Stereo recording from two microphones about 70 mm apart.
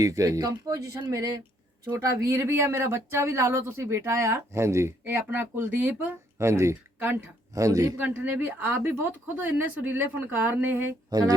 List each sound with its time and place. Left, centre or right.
0.0 s speech: right
2.0 s speech: right
5.8 s speech: centre
6.4 s speech: right
7.5 s speech: right
7.9 s speech: right
11.1 s speech: right